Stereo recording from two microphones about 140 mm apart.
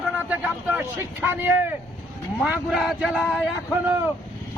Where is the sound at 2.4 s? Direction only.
5° right (ahead or behind).